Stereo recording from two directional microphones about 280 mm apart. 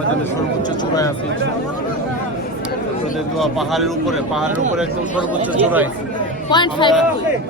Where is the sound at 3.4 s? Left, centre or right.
Centre.